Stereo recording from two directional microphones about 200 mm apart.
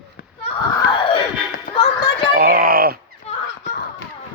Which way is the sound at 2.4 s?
50° right (ahead or behind).